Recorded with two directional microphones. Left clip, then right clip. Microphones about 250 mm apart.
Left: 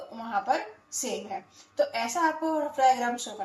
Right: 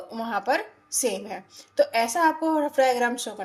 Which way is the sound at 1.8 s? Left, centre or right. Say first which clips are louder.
Right 5 dB; right.